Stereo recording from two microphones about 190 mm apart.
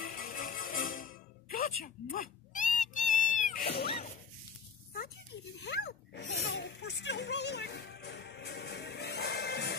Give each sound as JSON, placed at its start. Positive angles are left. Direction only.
{"t": 0.0, "sound": "music", "side_deg": 50}
{"t": 5.6, "sound": "snake", "side_deg": 60}